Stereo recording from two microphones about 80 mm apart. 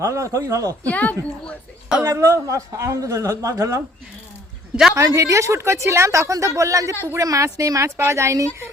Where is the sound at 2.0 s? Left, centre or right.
Right.